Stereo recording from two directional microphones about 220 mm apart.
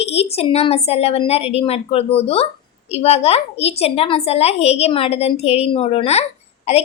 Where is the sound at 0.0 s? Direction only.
30° left (ahead or behind).